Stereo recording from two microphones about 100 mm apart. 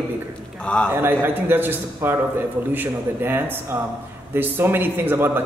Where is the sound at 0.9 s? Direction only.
20° right (ahead or behind).